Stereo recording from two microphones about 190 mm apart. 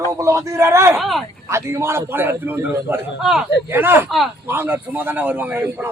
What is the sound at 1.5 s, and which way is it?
A man's voice, 15° right (ahead or behind).